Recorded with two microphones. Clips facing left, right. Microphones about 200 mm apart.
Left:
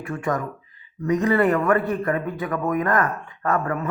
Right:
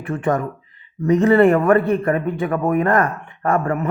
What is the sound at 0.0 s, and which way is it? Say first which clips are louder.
Speech: right 5 dB; 30° right (ahead or behind).